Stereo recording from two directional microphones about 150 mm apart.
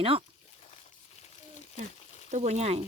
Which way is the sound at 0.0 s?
35° right (ahead or behind).